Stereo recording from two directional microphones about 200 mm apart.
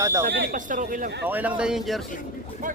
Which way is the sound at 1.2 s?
10° right (ahead or behind).